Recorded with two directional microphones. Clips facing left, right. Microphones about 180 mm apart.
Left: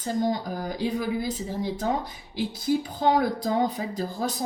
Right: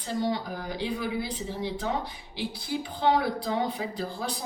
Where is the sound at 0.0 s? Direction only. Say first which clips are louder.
Left 3 dB; 45° left (ahead or behind).